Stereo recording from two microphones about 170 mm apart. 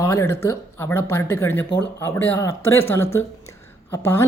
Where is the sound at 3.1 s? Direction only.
15° left (ahead or behind).